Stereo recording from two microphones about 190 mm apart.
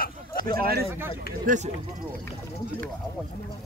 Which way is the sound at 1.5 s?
45° right (ahead or behind).